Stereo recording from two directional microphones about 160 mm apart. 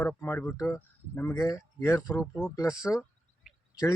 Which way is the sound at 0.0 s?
15° left (ahead or behind).